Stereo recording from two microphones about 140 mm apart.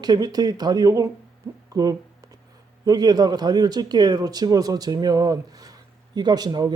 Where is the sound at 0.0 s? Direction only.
30° right (ahead or behind).